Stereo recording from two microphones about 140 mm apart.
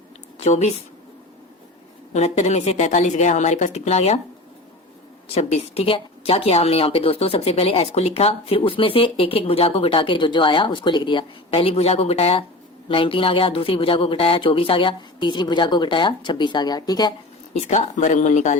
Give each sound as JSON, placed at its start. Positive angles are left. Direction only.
{"t": 0.3, "sound": "a woman's voice", "side_deg": 55}
{"t": 2.1, "sound": "speech", "side_deg": 50}
{"t": 5.3, "sound": "speech", "side_deg": 50}
{"t": 17.6, "sound": "speech", "side_deg": 60}